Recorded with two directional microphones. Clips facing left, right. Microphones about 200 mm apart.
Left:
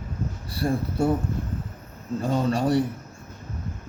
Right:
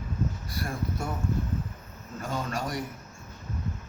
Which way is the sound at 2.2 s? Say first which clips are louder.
Left 9 dB; 35° left (ahead or behind).